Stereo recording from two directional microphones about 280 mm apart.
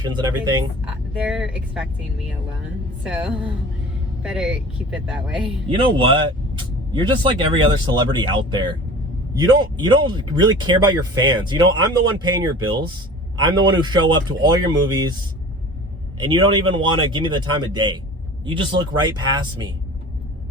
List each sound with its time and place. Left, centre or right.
0.9 s speech: centre
5.7 s speech: centre
16.1 s speech: centre